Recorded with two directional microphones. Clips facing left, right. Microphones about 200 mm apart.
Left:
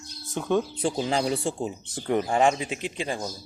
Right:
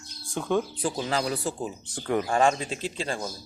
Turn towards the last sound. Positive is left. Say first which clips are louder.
# left 1 dB
turn(degrees=15)  # may be behind; listen again after turning